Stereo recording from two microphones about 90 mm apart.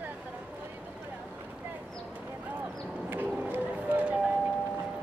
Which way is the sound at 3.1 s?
20° right (ahead or behind).